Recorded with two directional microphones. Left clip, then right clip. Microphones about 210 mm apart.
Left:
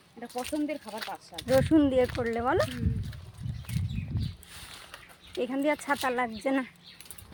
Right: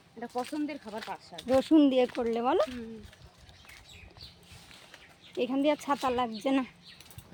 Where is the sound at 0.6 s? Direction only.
5° right (ahead or behind).